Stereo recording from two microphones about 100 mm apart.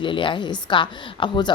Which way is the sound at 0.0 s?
55° left (ahead or behind).